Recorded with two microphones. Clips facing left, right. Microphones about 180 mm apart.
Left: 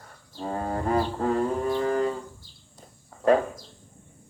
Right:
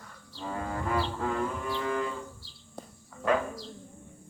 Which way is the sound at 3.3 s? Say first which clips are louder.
Left 7 dB; 40° left (ahead or behind).